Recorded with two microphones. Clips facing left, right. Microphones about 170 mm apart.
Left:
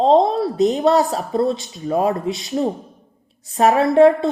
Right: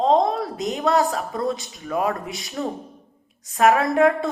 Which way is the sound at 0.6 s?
35° left (ahead or behind).